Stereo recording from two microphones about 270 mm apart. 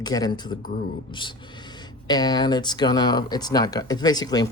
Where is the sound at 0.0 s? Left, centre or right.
Centre.